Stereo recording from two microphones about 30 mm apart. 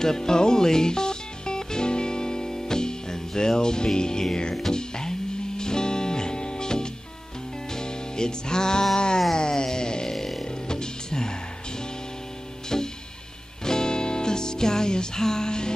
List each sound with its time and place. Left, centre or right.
0.0 s music: centre
8.9 s a sound: left
9.3 s music: left
10.1 s music: centre
10.7 s music: left
12.6 s music: left